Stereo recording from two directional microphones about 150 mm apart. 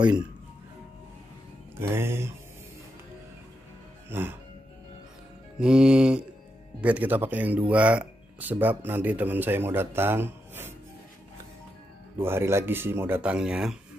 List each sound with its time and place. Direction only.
1.8 s speech: 15° right (ahead or behind)
4.1 s speech: 15° right (ahead or behind)
5.6 s speech: 5° right (ahead or behind)
12.2 s speech: 15° right (ahead or behind)